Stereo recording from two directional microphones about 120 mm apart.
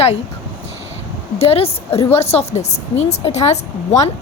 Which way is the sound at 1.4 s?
55° left (ahead or behind).